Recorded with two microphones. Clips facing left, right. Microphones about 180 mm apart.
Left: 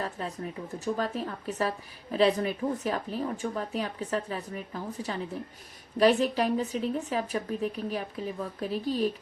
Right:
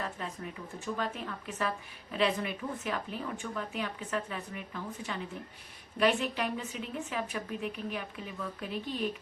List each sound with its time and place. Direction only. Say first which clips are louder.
0.2 s a woman's voice: left 5 dB; 35° left (ahead or behind)